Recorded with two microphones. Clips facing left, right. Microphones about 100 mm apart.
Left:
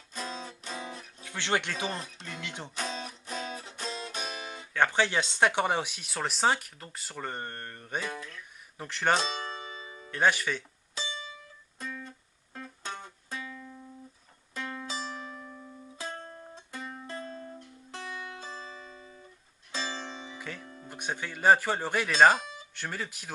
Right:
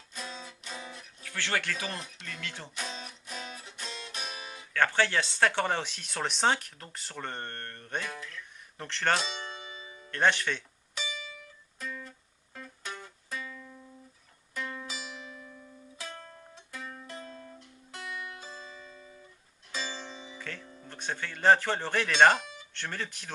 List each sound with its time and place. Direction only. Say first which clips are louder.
0.1 s music: left 4 dB; 40° left (ahead or behind)
1.2 s speech: left 2 dB; 20° left (ahead or behind)
2.7 s music: left 4 dB; 35° left (ahead or behind)
4.7 s speech: left 1 dB; 15° left (ahead or behind)
8.0 s speech: left 3 dB; 20° left (ahead or behind)
8.8 s speech: left 2 dB; 10° left (ahead or behind)
9.2 s music: left 4 dB; 40° left (ahead or behind)
10.1 s speech: even; 5° left (ahead or behind)
10.9 s music: even; 35° left (ahead or behind)
20.4 s music: right 1 dB; 10° left (ahead or behind)
20.8 s speech: left 1 dB; 15° left (ahead or behind)